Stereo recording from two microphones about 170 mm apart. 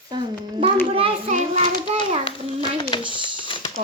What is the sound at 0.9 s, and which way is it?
Children playing, 35° right (ahead or behind).